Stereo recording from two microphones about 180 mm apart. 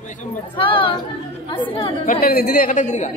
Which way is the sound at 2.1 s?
60° left (ahead or behind).